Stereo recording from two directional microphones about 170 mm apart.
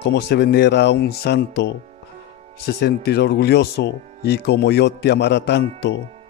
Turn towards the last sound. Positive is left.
turn(degrees=75)  # may be behind; listen again after turning